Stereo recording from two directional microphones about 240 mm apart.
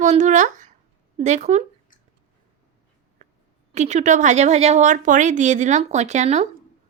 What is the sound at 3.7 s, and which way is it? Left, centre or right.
Speech, right.